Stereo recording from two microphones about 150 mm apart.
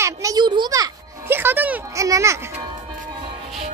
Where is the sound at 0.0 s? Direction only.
25° right (ahead or behind).